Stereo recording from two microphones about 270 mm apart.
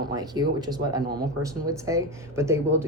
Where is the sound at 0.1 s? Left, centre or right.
Centre.